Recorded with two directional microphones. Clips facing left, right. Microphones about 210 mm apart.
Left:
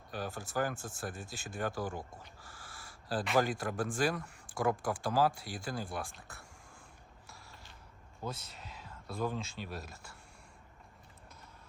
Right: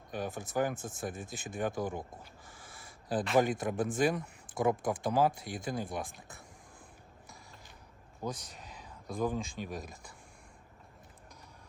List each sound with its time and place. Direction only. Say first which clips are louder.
0.1 s speech: right 3 dB; 20° right (ahead or behind)
8.2 s speech: right 3 dB; 15° right (ahead or behind)